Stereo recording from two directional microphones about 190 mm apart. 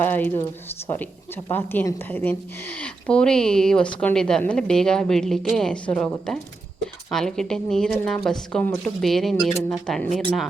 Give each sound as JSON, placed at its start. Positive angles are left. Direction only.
{"t": 0.0, "sound": "speech", "side_deg": 10}
{"t": 1.5, "sound": "a woman's voice", "side_deg": 10}